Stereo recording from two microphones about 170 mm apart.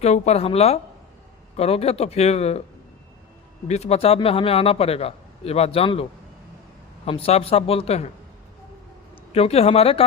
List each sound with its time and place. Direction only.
0.0 s a man's voice: 40° left (ahead or behind)
3.7 s a man's voice: 40° left (ahead or behind)
9.3 s a man's voice: 35° left (ahead or behind)